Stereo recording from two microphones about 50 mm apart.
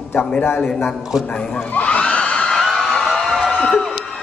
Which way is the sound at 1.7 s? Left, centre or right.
Left.